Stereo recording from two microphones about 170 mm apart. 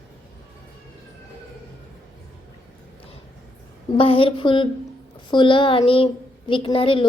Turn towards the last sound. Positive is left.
turn(degrees=30)  # may be behind; listen again after turning